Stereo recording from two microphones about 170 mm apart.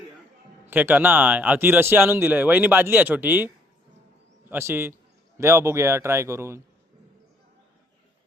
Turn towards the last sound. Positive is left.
turn(degrees=-15)  # may be behind; listen again after turning